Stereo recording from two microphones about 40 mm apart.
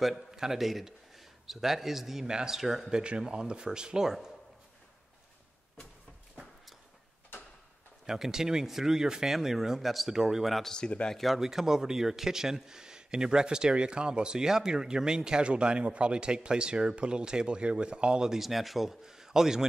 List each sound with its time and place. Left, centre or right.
0.0 s a man's voice: centre
2.2 s speech: centre
2.5 s speech: centre
2.9 s speech: right
8.1 s speech: centre
10.8 s a man's voice: centre
11.3 s speech: centre
18.4 s speech: centre